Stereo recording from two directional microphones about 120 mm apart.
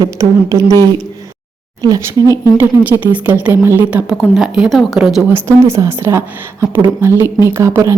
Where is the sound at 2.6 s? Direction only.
15° right (ahead or behind).